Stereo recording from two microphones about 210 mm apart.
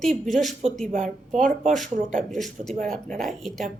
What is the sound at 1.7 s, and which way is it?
A woman's voice, centre (ahead or behind).